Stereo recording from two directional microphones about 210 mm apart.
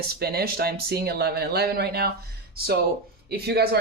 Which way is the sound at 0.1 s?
50° right (ahead or behind).